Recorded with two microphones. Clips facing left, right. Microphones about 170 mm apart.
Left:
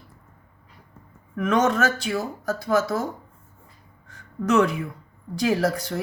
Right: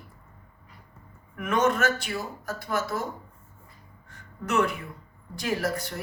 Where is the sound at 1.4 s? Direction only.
90° left.